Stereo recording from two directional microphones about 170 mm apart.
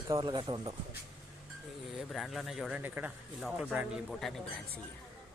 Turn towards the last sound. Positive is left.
turn(degrees=0)  # may be behind; listen again after turning